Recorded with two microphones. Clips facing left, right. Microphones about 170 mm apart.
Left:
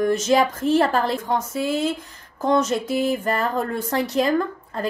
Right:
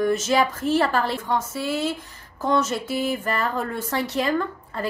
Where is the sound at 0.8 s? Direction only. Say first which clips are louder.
Left 2 dB; 45° left (ahead or behind).